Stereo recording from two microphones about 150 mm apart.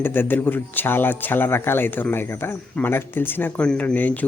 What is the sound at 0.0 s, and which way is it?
Speech, 15° left (ahead or behind).